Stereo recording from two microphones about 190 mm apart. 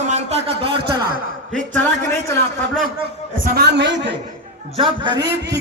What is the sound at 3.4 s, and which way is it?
Speech, 55° right (ahead or behind).